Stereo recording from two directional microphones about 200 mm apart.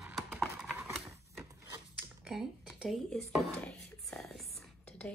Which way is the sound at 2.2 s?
Centre (ahead or behind).